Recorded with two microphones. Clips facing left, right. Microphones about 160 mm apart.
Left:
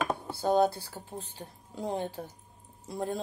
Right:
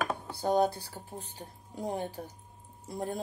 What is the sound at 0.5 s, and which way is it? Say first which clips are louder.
Speech: left 2 dB; 15° right (ahead or behind).